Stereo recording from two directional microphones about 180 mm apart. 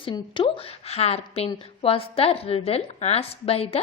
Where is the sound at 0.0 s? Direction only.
25° left (ahead or behind).